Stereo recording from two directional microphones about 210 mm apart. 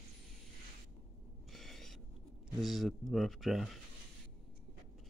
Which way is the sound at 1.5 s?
Centre (ahead or behind).